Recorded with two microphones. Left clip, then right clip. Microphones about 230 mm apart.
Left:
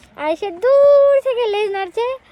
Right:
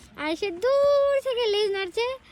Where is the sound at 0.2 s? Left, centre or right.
Centre.